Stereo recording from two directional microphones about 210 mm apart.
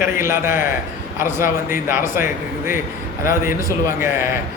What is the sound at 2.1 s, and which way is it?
A man's voice, 10° right (ahead or behind).